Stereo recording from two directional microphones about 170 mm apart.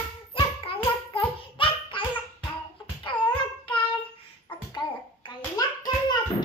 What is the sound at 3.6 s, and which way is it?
Child singing, 30° left (ahead or behind).